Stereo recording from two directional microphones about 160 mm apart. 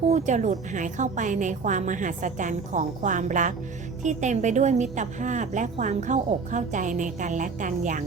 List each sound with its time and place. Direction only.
0.1 s a woman's voice: 50° right (ahead or behind)